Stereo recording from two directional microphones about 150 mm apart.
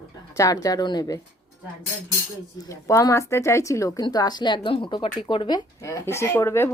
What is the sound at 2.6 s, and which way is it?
Speech, 20° left (ahead or behind).